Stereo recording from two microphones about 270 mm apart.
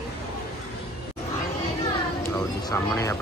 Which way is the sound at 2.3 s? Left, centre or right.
Centre.